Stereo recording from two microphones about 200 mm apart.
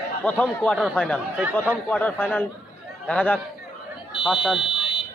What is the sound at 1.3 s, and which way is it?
Speech, 5° right (ahead or behind).